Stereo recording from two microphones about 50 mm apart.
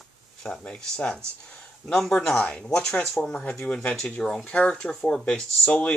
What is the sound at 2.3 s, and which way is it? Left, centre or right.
Speech, left.